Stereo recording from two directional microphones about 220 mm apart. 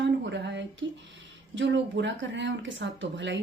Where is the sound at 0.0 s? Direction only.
50° right (ahead or behind).